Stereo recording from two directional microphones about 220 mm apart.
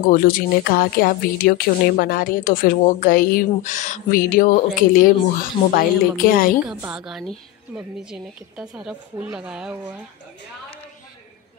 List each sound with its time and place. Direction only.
0.1 s speech: 40° left (ahead or behind)
6.6 s a woman's voice: 5° right (ahead or behind)